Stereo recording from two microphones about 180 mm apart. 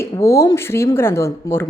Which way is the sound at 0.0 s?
15° left (ahead or behind).